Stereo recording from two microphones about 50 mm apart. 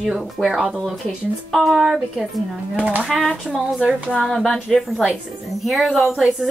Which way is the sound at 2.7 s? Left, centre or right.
Right.